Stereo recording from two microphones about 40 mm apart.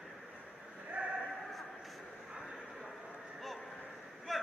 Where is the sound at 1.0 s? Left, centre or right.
Right.